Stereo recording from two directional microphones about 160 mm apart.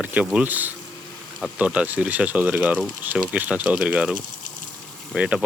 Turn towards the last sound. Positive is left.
turn(degrees=-5)  # may be behind; listen again after turning